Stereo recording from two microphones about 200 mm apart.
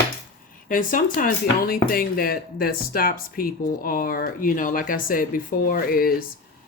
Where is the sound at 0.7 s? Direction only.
45° left (ahead or behind).